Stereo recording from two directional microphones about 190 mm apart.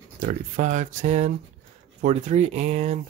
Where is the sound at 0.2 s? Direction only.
40° right (ahead or behind).